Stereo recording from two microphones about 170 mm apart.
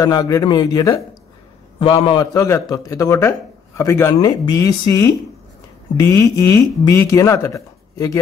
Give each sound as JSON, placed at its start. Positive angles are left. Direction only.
{"t": 0.0, "sound": "a man's voice", "side_deg": 20}
{"t": 1.8, "sound": "a man's voice", "side_deg": 30}